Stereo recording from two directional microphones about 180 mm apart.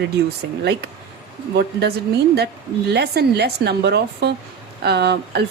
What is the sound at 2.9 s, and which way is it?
Speech, 65° right (ahead or behind).